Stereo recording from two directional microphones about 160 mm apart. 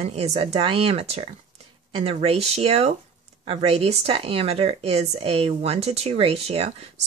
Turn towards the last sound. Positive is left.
turn(degrees=-40)  # may be behind; listen again after turning